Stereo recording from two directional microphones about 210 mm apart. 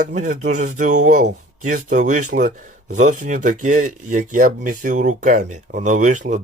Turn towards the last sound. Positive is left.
turn(degrees=-35)  # may be behind; listen again after turning